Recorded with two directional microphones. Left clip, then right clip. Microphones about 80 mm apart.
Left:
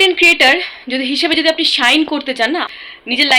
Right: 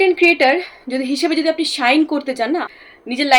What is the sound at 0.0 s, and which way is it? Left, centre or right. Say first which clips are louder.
Speech: left 3 dB; right.